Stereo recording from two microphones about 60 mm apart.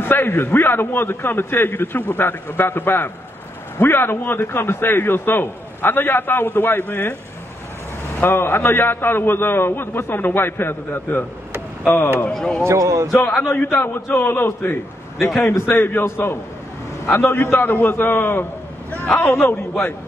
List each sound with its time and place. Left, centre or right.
0.0 s a man's voice: left
8.2 s a man's voice: left
12.3 s speech: centre
12.6 s speech: right
13.5 s a man's voice: left
14.3 s a man's voice: left
15.2 s a man's voice: left